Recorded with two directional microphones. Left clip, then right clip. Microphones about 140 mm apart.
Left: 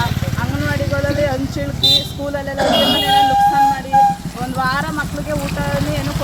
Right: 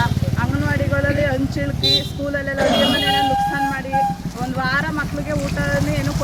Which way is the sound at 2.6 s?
25° right (ahead or behind).